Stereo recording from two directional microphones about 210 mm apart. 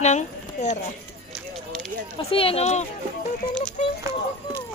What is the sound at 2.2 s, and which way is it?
Speech, 25° left (ahead or behind).